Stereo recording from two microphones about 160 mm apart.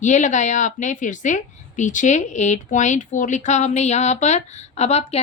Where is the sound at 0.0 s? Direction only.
50° left (ahead or behind).